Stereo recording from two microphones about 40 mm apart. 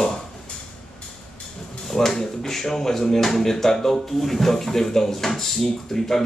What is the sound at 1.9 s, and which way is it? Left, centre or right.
Speech, centre.